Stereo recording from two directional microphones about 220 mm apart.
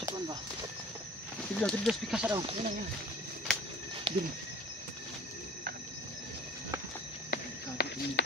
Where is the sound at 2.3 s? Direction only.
25° right (ahead or behind).